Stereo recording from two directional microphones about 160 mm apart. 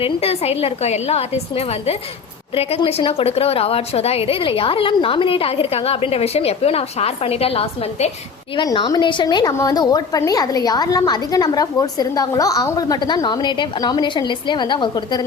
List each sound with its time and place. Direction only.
0.0 s a woman's voice: 40° left (ahead or behind)
8.5 s a woman's voice: 30° left (ahead or behind)